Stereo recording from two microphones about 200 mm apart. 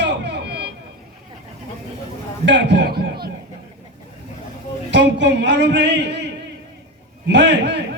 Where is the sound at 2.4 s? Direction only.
60° right (ahead or behind).